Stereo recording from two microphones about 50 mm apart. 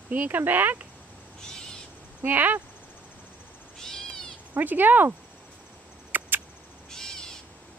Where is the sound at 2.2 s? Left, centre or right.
Right.